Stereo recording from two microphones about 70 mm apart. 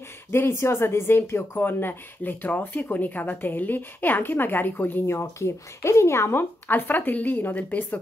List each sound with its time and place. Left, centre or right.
0.3 s speech: left
6.7 s speech: left